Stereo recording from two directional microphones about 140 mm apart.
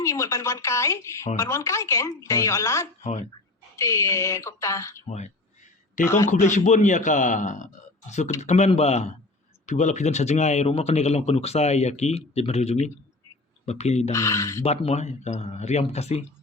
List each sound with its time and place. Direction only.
0.0 s speech: 20° left (ahead or behind)
3.0 s speech: 55° left (ahead or behind)
3.8 s speech: 20° left (ahead or behind)
5.0 s speech: 55° left (ahead or behind)
6.1 s speech: 20° left (ahead or behind)
6.3 s a man's voice: 55° left (ahead or behind)
14.1 s speech: 20° left (ahead or behind)
14.6 s speech: 45° left (ahead or behind)